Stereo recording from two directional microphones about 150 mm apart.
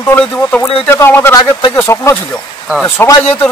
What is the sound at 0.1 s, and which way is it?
A man's voice, 15° left (ahead or behind).